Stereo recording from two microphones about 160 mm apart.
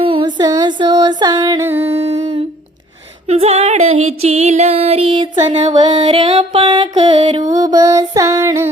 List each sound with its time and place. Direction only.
0.0 s female singing: 30° right (ahead or behind)
1.8 s humming: 40° right (ahead or behind)
3.2 s female singing: 40° right (ahead or behind)
5.7 s female singing: 30° right (ahead or behind)
7.5 s a sound: 25° right (ahead or behind)